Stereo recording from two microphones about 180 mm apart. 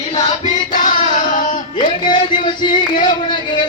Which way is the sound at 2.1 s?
25° left (ahead or behind).